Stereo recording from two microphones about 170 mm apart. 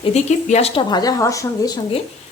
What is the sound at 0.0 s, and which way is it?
Speech, 40° left (ahead or behind).